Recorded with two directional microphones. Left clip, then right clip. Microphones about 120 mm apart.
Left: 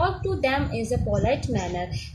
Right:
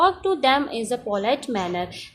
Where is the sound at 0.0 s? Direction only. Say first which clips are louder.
Right 5 dB; 35° right (ahead or behind).